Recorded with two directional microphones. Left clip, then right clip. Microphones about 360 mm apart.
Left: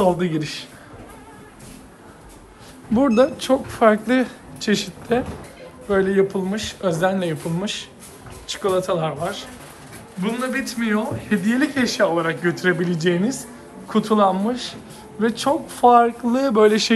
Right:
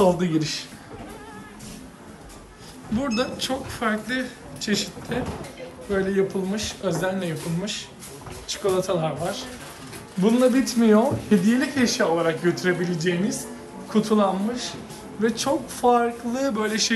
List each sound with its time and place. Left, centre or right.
0.0 s speech: centre
3.0 s speech: centre